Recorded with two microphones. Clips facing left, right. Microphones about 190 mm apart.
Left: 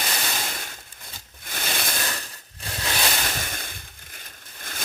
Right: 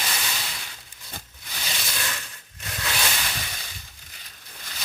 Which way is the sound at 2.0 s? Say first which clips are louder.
Left 2 dB; 40° left (ahead or behind).